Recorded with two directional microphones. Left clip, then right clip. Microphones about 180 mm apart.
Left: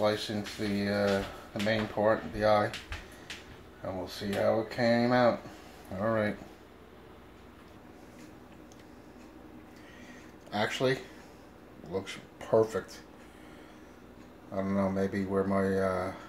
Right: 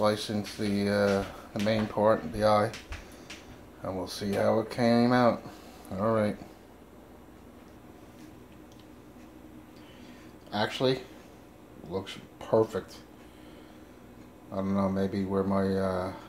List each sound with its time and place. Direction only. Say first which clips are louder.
0.0 s speech: right 2 dB; 15° right (ahead or behind)
3.8 s speech: right 2 dB; 15° right (ahead or behind)
10.5 s speech: right 1 dB; centre (ahead or behind)
14.5 s speech: right 1 dB; centre (ahead or behind)